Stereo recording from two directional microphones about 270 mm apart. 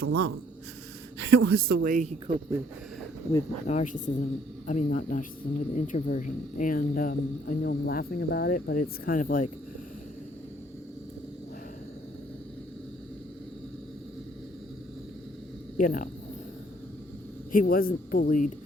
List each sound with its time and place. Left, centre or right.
0.0 s speech: right
3.7 s speech: left
15.8 s speech: left
17.5 s speech: left